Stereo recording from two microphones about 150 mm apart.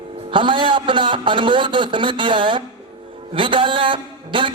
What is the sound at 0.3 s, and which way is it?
A man's voice, 35° right (ahead or behind).